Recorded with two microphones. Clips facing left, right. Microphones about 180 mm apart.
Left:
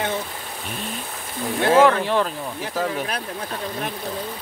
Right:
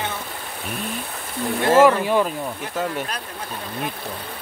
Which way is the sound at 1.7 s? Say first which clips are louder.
Right 1 dB; 5° right (ahead or behind).